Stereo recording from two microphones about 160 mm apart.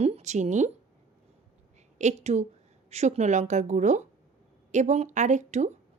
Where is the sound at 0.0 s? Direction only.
45° right (ahead or behind).